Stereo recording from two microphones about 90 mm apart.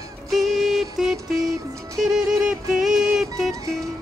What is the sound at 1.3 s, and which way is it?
Music, 45° right (ahead or behind).